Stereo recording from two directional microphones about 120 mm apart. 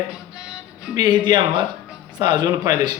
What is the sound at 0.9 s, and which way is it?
Speech, 40° right (ahead or behind).